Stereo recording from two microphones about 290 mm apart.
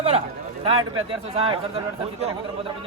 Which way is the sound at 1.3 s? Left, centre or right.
Centre.